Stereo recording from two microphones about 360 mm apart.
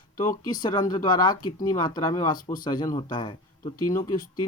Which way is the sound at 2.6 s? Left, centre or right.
Centre.